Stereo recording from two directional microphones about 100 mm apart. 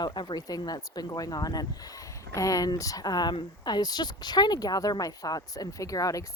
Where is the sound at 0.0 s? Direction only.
50° left (ahead or behind).